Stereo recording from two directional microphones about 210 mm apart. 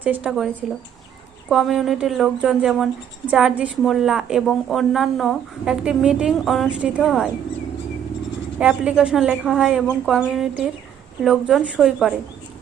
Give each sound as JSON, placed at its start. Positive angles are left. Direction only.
{"t": 0.0, "sound": "speech", "side_deg": -5}
{"t": 8.5, "sound": "speech", "side_deg": -5}